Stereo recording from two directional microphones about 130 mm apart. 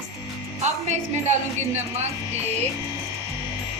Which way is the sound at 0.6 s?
60° right (ahead or behind).